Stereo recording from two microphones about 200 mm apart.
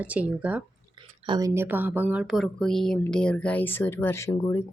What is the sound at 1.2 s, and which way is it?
Speech, 25° right (ahead or behind).